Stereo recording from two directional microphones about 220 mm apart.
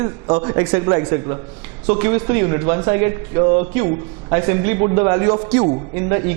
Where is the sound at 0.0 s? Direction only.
25° right (ahead or behind).